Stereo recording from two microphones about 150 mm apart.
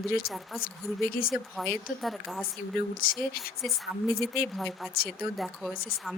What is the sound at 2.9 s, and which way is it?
Speech, 75° left (ahead or behind).